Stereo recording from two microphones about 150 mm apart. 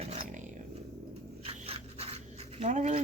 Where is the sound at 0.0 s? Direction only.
40° right (ahead or behind).